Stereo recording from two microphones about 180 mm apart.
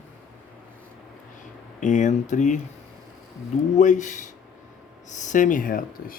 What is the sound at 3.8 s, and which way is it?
Speech, 45° left (ahead or behind).